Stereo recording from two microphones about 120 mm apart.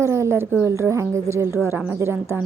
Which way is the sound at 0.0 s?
20° right (ahead or behind).